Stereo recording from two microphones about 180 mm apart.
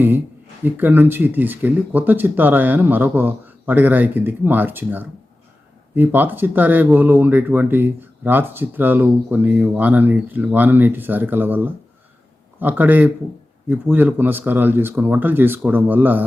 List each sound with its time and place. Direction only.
0.6 s speech: 10° right (ahead or behind)